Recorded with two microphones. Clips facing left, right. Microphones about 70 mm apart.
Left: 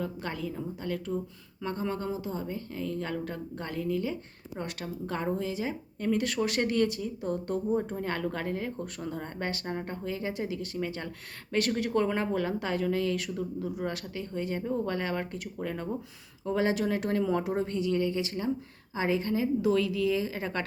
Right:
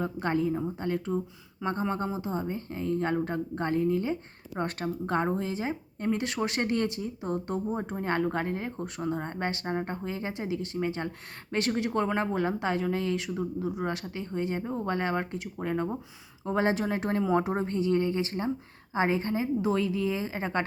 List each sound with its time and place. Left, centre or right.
0.0 s speech: right